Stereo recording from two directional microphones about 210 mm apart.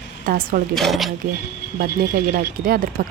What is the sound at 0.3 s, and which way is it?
Speech, 45° right (ahead or behind).